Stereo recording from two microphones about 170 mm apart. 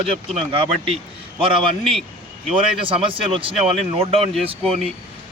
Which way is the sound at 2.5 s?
30° right (ahead or behind).